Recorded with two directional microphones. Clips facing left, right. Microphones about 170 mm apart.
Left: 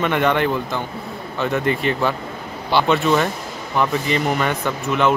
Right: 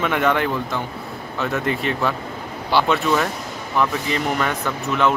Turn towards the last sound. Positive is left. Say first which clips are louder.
# left 1 dB
turn(degrees=0)  # may be behind; listen again after turning